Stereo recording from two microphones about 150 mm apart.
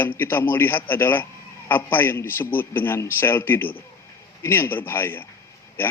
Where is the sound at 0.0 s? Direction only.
15° left (ahead or behind).